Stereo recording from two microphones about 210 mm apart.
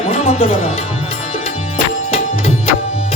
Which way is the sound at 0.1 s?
30° left (ahead or behind).